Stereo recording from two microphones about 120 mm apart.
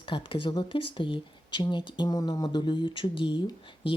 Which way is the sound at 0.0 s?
45° left (ahead or behind).